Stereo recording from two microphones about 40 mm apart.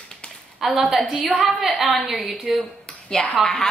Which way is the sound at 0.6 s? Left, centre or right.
Centre.